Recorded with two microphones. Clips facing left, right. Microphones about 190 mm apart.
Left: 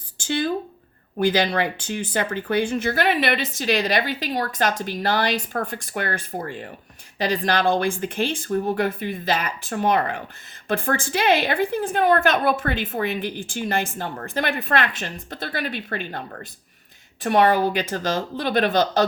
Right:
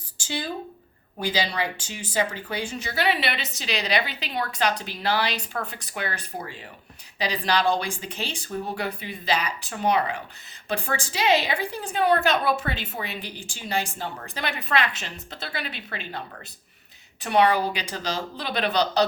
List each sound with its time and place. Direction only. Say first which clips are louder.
0.2 s speech: left 7 dB; 55° left (ahead or behind)
17.2 s speech: left 3 dB; 50° left (ahead or behind)